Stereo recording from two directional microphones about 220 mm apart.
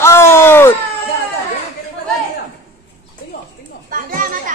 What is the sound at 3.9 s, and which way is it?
Children playing, 40° right (ahead or behind).